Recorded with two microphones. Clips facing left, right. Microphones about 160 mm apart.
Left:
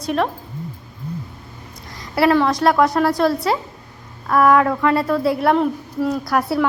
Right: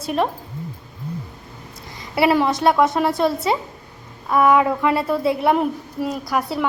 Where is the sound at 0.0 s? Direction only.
Centre (ahead or behind).